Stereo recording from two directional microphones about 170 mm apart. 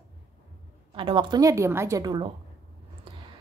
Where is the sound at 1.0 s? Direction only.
30° right (ahead or behind).